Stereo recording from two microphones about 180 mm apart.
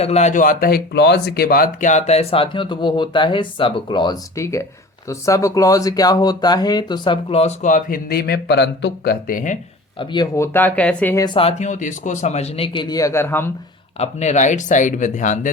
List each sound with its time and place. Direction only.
0.0 s speech: 40° left (ahead or behind)
10.0 s speech: 25° left (ahead or behind)
11.3 s speech: 35° left (ahead or behind); by 13.5 s 15° left (ahead or behind)
14.0 s speech: 40° left (ahead or behind)